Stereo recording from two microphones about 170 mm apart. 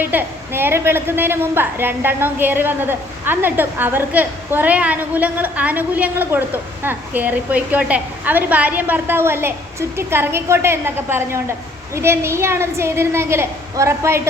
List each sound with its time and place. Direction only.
0.0 s a woman's voice: 10° right (ahead or behind)